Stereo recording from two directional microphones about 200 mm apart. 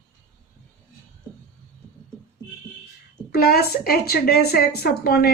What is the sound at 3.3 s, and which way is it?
A woman's voice, 50° left (ahead or behind).